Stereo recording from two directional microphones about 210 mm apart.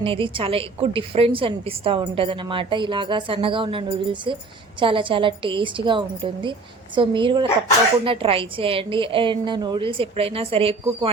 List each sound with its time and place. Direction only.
0.0 s a woman's voice: 25° right (ahead or behind)